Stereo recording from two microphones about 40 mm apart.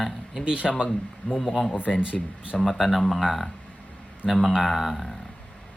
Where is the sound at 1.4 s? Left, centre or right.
Centre.